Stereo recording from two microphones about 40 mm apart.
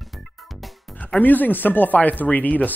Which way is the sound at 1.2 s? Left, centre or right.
Left.